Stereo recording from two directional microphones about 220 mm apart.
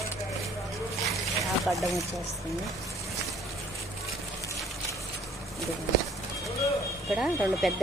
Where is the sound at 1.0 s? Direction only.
Centre (ahead or behind).